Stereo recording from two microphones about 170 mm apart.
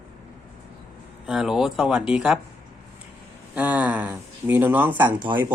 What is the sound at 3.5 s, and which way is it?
Speech, 10° right (ahead or behind).